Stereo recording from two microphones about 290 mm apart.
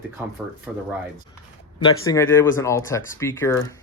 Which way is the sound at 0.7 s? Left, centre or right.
Centre.